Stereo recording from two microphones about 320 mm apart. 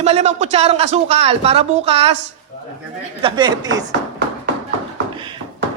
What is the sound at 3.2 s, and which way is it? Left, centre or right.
Speech, centre.